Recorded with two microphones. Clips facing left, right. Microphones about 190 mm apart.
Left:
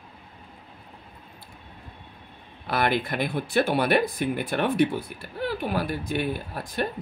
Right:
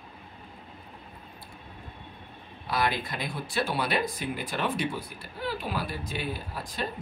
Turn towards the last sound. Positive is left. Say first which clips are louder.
# left 5 dB
turn(degrees=55)  # may be behind; listen again after turning